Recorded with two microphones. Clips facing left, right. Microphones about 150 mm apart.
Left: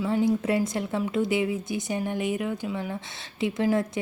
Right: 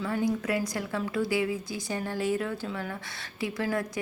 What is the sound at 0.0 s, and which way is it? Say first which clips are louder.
A woman's voice: left 4 dB; 20° left (ahead or behind).